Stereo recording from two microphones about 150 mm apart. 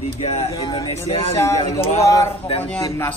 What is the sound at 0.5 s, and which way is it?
Speech, 25° left (ahead or behind).